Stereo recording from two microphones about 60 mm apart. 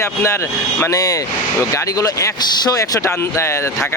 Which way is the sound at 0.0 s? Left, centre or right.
Left.